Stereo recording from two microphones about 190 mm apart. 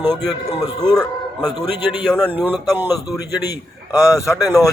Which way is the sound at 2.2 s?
10° right (ahead or behind).